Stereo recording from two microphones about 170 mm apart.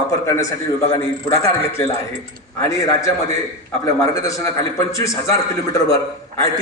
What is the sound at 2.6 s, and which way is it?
Speech, 15° left (ahead or behind).